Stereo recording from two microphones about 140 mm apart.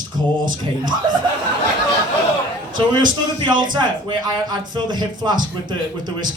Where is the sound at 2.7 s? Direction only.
30° right (ahead or behind).